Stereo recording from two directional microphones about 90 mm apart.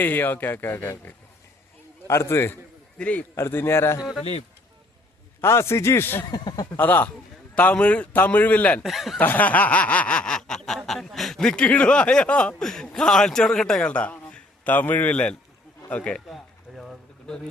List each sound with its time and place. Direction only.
0.0 s speech: 20° left (ahead or behind)
3.0 s a man's voice: 15° left (ahead or behind)
3.3 s speech: 25° left (ahead or behind)
5.4 s speech: 30° left (ahead or behind)
6.3 s speech: 50° left (ahead or behind)
6.7 s a man's voice: 20° left (ahead or behind)
8.8 s speech: centre (ahead or behind)
9.1 s snicker: 20° left (ahead or behind)
15.9 s a man's voice: 15° left (ahead or behind)
16.2 s a sound: centre (ahead or behind)